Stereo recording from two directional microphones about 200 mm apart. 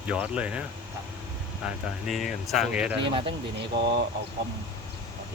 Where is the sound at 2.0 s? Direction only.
Centre (ahead or behind).